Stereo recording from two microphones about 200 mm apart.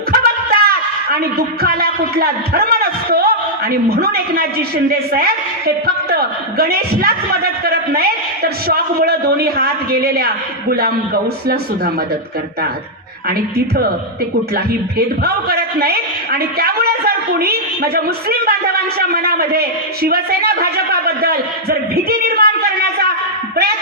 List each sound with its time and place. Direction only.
0.1 s a sound: 50° right (ahead or behind)
1.4 s a man's voice: 50° right (ahead or behind)
13.2 s a man's voice: 50° right (ahead or behind)